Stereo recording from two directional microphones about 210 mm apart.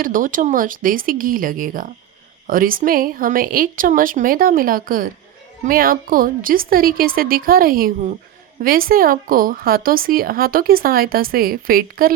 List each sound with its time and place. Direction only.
0.0 s a woman's voice: 40° right (ahead or behind)